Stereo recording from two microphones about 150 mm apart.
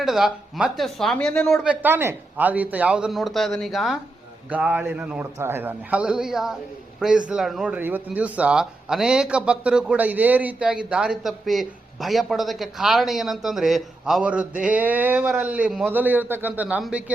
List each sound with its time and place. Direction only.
0.0 s speech: centre (ahead or behind)
1.6 s a man's voice: 10° right (ahead or behind)